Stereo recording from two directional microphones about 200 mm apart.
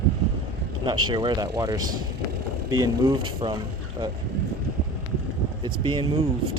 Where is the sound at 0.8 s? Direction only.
20° right (ahead or behind).